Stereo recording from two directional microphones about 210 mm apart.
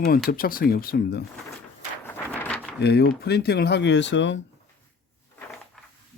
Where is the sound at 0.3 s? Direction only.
45° left (ahead or behind).